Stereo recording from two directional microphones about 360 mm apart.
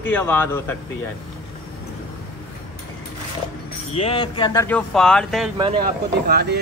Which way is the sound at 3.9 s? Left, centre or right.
Centre.